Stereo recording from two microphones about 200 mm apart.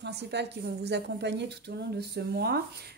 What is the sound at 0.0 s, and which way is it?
A woman's voice, 60° right (ahead or behind).